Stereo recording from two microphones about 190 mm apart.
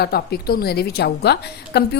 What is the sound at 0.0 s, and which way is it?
A woman's voice, 55° left (ahead or behind).